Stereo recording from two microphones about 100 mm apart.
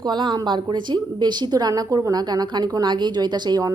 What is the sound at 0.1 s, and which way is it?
A woman's voice, 50° right (ahead or behind).